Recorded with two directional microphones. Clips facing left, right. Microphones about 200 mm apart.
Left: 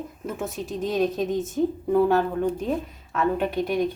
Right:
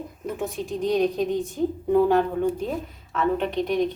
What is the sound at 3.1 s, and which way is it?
Speech, 5° left (ahead or behind).